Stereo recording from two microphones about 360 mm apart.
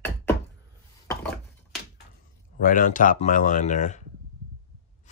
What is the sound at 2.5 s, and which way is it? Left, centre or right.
Speech, left.